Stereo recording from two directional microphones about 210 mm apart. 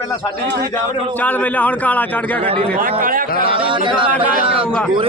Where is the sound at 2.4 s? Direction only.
25° right (ahead or behind).